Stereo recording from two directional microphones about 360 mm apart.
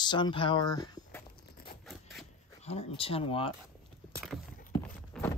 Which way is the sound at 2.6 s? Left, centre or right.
Centre.